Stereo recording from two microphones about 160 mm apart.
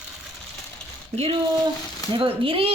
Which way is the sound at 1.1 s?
40° right (ahead or behind).